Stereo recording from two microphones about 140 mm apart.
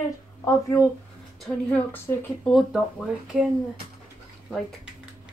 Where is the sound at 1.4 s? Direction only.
10° left (ahead or behind).